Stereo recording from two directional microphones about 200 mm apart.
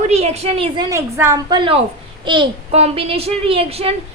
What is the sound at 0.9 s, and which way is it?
A woman's voice, 15° right (ahead or behind).